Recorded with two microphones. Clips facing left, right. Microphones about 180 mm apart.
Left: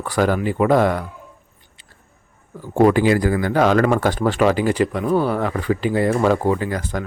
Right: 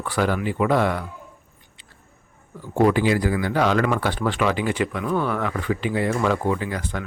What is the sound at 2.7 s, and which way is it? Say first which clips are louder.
Speech: left 4 dB; 50° left (ahead or behind).